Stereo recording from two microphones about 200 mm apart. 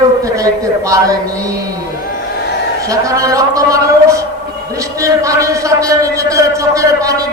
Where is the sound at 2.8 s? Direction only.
15° right (ahead or behind).